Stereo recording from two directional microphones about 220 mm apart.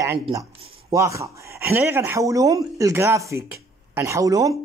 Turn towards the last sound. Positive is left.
turn(degrees=-15)  # may be behind; listen again after turning